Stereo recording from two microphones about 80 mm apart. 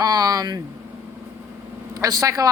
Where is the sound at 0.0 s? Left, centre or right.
Right.